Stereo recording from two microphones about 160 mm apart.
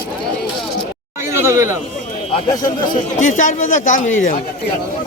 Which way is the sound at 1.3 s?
15° right (ahead or behind).